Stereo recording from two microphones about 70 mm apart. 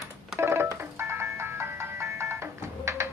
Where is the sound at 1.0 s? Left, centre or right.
Right.